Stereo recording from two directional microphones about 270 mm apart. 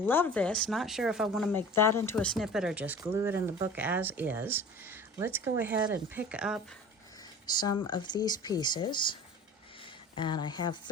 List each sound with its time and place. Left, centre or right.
0.0 s speech: centre
7.4 s speech: centre
10.2 s speech: centre